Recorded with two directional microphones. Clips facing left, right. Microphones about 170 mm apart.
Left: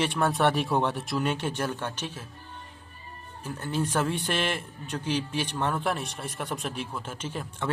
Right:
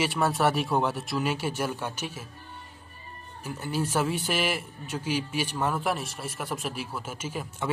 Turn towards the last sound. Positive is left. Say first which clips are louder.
# even
turn(degrees=-10)  # may be behind; listen again after turning